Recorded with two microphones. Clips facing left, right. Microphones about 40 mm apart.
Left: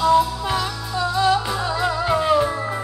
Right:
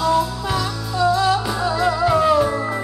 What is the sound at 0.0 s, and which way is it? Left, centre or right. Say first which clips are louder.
Music: left 2 dB; left.